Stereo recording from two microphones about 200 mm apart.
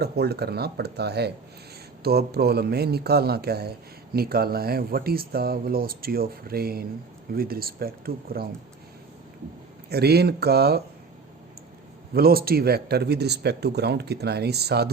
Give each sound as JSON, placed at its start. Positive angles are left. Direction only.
{"t": 0.0, "sound": "speech", "side_deg": -55}
{"t": 9.9, "sound": "speech", "side_deg": -55}
{"t": 12.1, "sound": "speech", "side_deg": -50}